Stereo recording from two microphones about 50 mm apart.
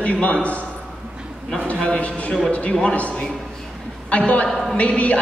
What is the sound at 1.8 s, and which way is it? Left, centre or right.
A man's voice, left.